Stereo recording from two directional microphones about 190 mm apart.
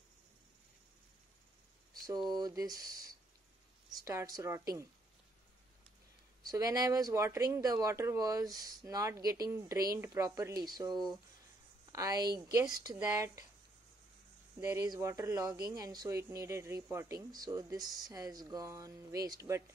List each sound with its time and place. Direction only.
2.0 s speech: 20° right (ahead or behind)
6.4 s speech: 20° right (ahead or behind)
14.6 s speech: 15° right (ahead or behind)